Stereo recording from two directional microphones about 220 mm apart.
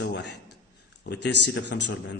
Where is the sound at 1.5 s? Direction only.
55° left (ahead or behind).